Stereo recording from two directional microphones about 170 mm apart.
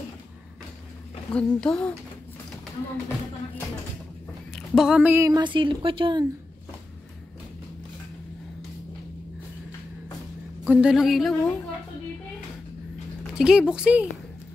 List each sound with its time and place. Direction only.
1.3 s a woman's voice: 5° left (ahead or behind)
4.7 s a sound: 5° right (ahead or behind)
5.3 s speech: 30° right (ahead or behind)
10.6 s a woman's voice: 5° right (ahead or behind)
13.4 s a woman's voice: 5° right (ahead or behind)